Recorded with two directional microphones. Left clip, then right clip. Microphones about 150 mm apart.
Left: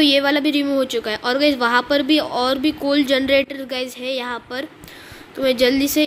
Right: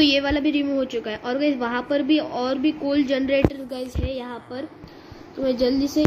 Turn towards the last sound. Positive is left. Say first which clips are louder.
# left 5 dB
turn(degrees=20)  # may be behind; listen again after turning